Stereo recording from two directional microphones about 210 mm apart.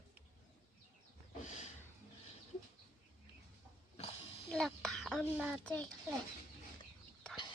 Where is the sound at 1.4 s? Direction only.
35° left (ahead or behind).